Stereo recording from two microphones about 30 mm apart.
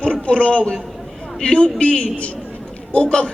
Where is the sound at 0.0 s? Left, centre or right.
Left.